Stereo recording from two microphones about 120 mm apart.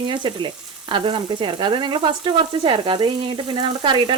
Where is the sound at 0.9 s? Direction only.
45° right (ahead or behind).